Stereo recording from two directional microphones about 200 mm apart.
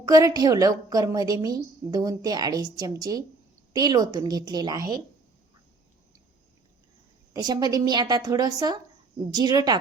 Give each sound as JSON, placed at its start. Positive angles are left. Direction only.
{"t": 0.0, "sound": "a woman's voice", "side_deg": -15}
{"t": 7.3, "sound": "a woman's voice", "side_deg": -20}